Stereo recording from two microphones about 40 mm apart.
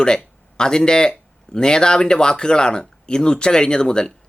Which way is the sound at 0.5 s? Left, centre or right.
Centre.